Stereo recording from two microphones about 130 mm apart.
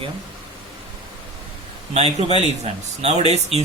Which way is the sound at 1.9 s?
55° right (ahead or behind).